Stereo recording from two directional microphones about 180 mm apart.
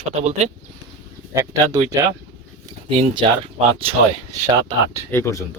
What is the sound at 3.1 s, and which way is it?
Speech, 30° right (ahead or behind).